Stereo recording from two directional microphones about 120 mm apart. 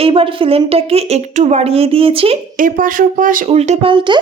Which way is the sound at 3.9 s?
45° right (ahead or behind).